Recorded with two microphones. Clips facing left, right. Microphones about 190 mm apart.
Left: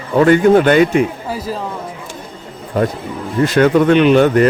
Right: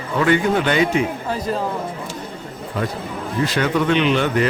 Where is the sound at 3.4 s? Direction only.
50° left (ahead or behind).